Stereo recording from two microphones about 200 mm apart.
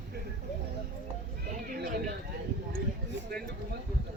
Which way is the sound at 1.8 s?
50° right (ahead or behind).